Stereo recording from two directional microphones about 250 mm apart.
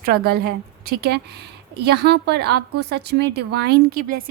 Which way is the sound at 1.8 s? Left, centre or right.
Right.